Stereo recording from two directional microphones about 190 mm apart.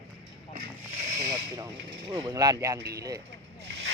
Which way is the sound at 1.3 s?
20° right (ahead or behind).